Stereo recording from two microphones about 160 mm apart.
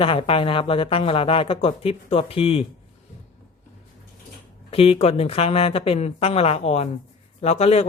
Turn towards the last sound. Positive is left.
turn(degrees=40)  # may be behind; listen again after turning